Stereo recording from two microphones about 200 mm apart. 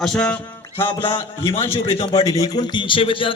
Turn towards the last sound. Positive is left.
turn(degrees=25)  # may be behind; listen again after turning